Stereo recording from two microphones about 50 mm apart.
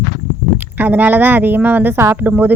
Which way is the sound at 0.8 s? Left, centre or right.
Right.